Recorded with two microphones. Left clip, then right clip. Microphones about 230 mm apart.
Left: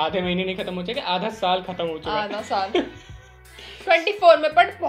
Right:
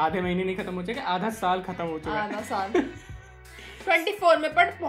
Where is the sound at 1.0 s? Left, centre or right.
Right.